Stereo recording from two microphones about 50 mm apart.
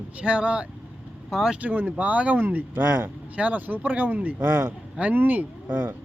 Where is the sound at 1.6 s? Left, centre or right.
Right.